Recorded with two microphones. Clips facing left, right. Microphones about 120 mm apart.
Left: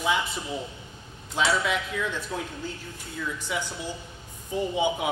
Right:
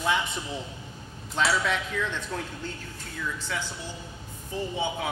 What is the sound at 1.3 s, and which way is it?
Speech, centre (ahead or behind).